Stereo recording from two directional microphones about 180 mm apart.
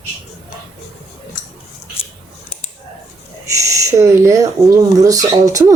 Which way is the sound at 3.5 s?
20° right (ahead or behind).